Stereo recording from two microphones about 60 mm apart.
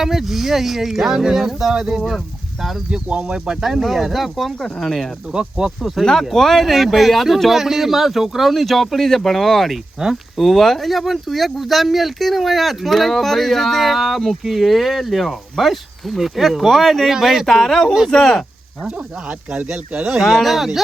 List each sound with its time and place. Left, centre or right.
0.0 s speech: centre
3.1 s speech: centre
5.3 s speech: centre
17.4 s speech: centre
18.9 s speech: centre
20.1 s speech: centre